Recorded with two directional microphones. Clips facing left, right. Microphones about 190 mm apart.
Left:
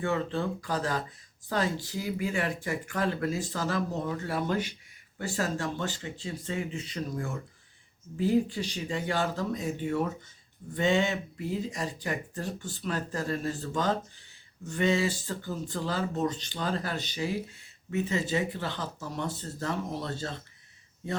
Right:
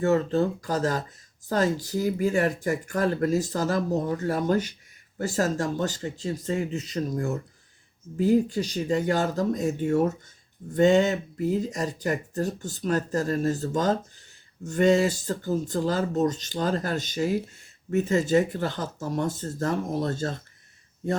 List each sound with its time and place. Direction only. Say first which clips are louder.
0.0 s speech: right 7 dB; 45° right (ahead or behind)